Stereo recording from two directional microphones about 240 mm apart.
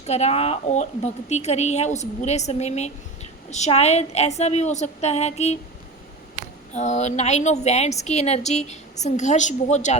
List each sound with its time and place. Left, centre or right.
0.0 s a woman's voice: left
6.7 s a woman's voice: left